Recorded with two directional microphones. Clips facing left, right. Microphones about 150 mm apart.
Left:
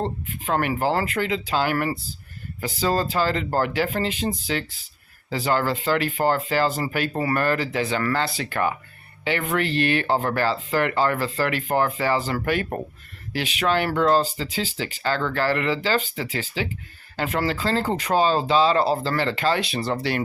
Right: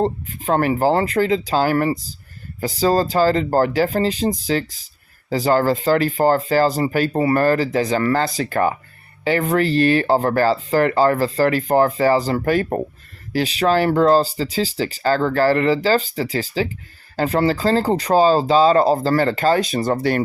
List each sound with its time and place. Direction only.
0.0 s speech: 35° right (ahead or behind)